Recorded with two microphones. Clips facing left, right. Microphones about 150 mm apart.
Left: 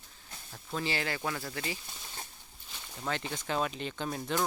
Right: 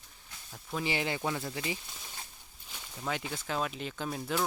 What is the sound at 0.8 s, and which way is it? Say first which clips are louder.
Speech: right 2 dB; 15° right (ahead or behind).